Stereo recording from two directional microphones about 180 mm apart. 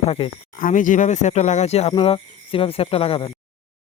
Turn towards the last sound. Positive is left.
turn(degrees=30)  # may be behind; listen again after turning